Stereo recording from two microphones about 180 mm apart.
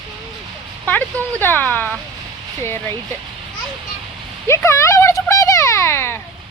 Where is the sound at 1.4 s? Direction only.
10° left (ahead or behind).